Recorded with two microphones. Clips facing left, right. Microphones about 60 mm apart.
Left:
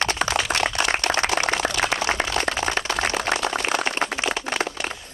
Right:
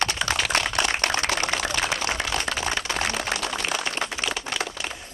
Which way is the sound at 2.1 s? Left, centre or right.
Left.